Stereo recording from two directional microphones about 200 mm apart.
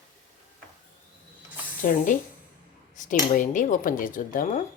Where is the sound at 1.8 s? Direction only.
40° left (ahead or behind).